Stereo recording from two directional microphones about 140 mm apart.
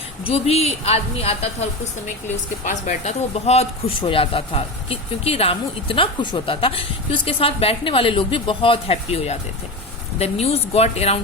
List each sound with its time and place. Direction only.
0.3 s speech: 45° left (ahead or behind)
2.6 s speech: 60° left (ahead or behind)